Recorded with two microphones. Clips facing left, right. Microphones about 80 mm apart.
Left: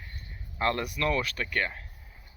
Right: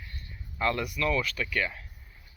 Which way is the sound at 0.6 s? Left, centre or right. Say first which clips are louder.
Even; left.